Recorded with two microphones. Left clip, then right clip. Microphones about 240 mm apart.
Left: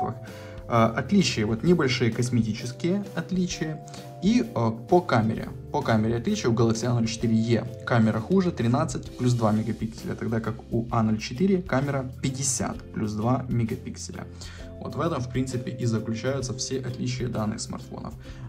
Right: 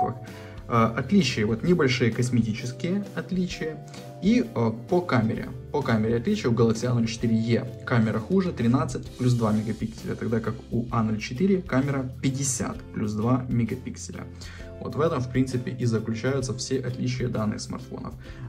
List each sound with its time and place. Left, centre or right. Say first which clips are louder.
0.7 s speech: left 1 dB; centre
9.7 s speech: right 1 dB; centre
14.8 s speech: right 3 dB; centre